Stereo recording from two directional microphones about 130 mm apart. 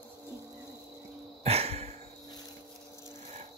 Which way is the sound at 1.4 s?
50° right (ahead or behind).